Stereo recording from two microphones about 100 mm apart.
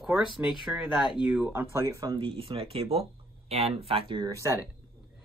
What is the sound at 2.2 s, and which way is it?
Speech, 70° right (ahead or behind).